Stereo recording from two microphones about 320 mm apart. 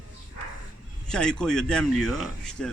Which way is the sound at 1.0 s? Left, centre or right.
Centre.